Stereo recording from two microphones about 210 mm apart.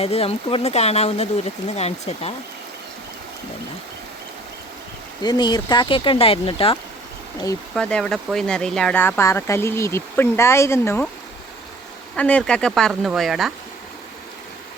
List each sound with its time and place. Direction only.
0.0 s speech: 30° left (ahead or behind)
5.2 s speech: 20° left (ahead or behind)
7.8 s speech: 5° left (ahead or behind)
12.1 s speech: 5° left (ahead or behind)